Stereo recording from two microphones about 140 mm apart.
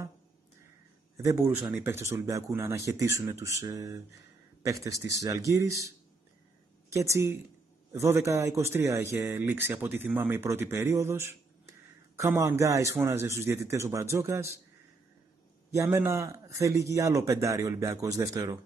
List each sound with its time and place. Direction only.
1.1 s speech: 20° right (ahead or behind)
15.7 s speech: 20° right (ahead or behind)